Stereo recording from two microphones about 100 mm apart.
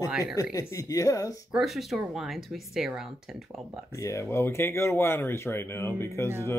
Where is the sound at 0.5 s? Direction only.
35° left (ahead or behind).